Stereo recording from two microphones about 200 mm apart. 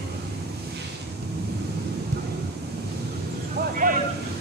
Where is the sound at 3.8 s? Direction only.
45° right (ahead or behind).